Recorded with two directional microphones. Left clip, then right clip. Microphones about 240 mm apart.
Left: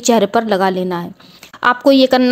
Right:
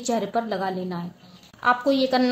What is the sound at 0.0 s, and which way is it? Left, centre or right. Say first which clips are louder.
A woman's voice: left 12 dB; left.